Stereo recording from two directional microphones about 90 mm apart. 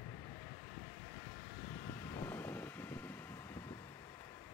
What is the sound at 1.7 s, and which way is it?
Vehicle, 30° left (ahead or behind).